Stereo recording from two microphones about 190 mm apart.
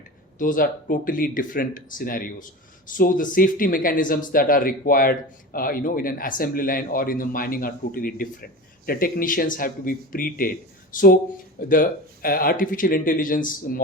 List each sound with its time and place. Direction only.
0.3 s speech: 45° left (ahead or behind)